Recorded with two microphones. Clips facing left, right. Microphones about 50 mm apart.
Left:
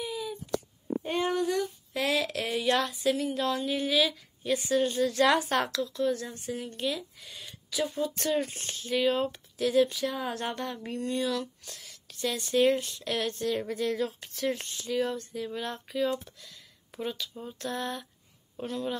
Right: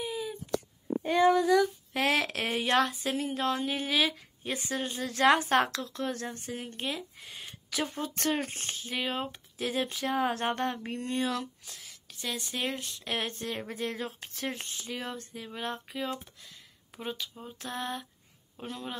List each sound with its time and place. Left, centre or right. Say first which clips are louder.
0.0 s a sound: even; right
2.0 s speech: right 1 dB; right
4.7 s speech: left 8 dB; right
7.7 s speech: left 3 dB; right
8.8 s speech: left 7 dB; centre
11.6 s speech: left 1 dB; centre
13.0 s speech: left 4 dB; right
17.4 s a sound: left 3 dB; centre